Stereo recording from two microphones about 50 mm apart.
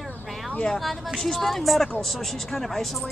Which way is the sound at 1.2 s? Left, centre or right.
Centre.